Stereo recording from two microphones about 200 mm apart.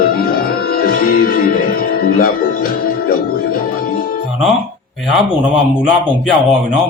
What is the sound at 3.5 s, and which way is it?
Music, 45° left (ahead or behind).